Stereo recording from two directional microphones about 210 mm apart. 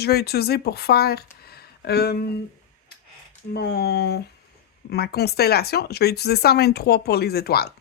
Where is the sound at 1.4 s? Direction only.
50° left (ahead or behind).